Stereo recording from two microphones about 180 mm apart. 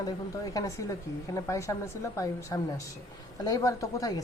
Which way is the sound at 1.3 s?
15° left (ahead or behind).